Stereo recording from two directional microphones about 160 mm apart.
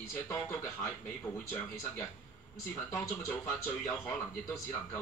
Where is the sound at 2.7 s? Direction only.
10° left (ahead or behind).